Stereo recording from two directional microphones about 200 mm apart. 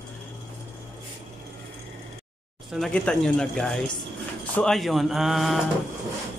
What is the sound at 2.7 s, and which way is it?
Speech, centre (ahead or behind).